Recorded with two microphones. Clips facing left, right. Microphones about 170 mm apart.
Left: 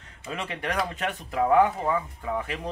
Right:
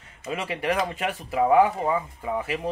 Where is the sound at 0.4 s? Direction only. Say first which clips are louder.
Right 3 dB; 5° right (ahead or behind).